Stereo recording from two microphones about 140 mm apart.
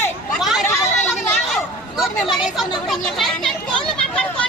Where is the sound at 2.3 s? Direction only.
Centre (ahead or behind).